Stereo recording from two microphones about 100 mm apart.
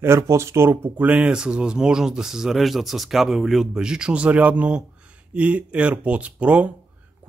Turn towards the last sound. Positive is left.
turn(degrees=-10)  # may be behind; listen again after turning